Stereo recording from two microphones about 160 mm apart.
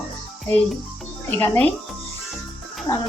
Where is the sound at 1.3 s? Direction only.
10° left (ahead or behind).